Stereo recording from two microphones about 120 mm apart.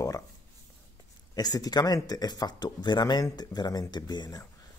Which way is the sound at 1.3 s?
35° left (ahead or behind).